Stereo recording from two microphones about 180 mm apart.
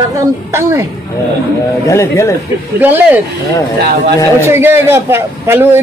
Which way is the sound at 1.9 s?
15° left (ahead or behind).